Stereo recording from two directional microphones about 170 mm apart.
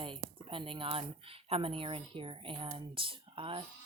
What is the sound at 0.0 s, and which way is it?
Speech, 30° right (ahead or behind).